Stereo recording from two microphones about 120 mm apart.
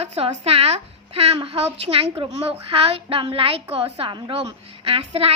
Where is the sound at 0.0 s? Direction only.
60° right (ahead or behind).